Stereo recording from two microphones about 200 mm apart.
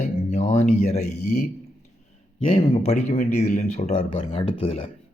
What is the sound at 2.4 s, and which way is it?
Speech, 30° left (ahead or behind).